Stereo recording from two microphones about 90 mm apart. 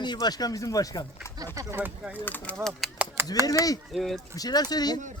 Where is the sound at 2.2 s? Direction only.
20° left (ahead or behind).